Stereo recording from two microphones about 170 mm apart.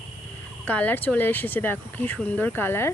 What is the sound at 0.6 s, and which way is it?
Speech, 10° left (ahead or behind).